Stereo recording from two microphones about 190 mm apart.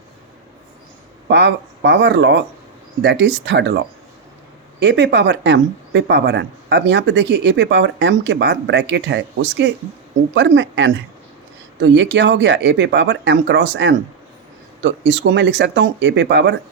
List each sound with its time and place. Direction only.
1.3 s speech: 65° right (ahead or behind)
4.8 s speech: 65° right (ahead or behind)